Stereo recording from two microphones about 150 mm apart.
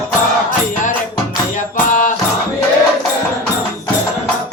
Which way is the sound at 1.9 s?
60° left (ahead or behind).